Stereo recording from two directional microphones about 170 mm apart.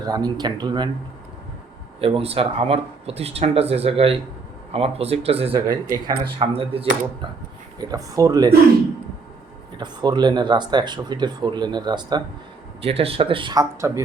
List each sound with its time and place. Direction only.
0.0 s speech: 20° right (ahead or behind)
2.0 s speech: 35° right (ahead or behind)
5.5 s speech: 20° right (ahead or behind)
6.4 s speech: 35° right (ahead or behind)
7.8 s speech: 20° right (ahead or behind)
9.7 s speech: 25° right (ahead or behind)
12.8 s speech: 35° right (ahead or behind); by 14.0 s 20° right (ahead or behind)